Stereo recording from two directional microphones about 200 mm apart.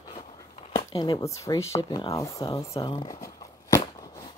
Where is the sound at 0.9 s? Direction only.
20° left (ahead or behind).